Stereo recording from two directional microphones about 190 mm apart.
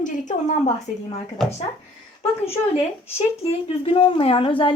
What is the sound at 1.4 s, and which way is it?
Speech, centre (ahead or behind).